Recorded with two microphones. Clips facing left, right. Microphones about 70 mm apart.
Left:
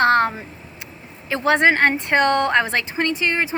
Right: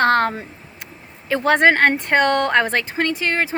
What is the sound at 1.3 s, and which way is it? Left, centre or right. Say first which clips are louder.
A woman's voice: right 2 dB; right.